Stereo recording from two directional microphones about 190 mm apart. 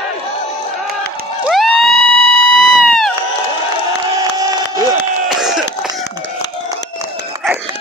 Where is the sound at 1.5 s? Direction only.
Centre (ahead or behind).